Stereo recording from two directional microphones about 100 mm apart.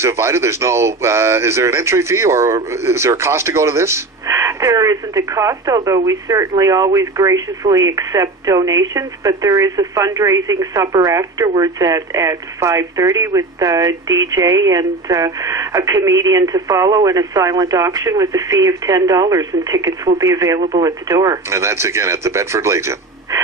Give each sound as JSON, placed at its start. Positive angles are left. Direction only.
{"t": 0.0, "sound": "speech", "side_deg": -25}